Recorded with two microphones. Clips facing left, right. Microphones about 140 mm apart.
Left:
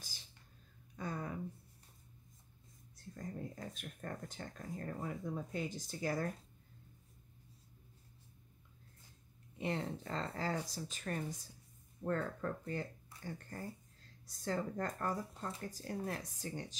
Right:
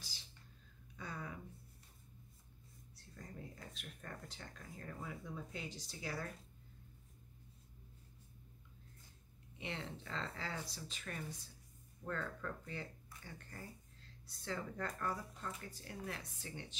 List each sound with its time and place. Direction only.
0.9 s a sound: 45° left (ahead or behind)
3.2 s speech: 45° left (ahead or behind)
9.6 s speech: 40° left (ahead or behind)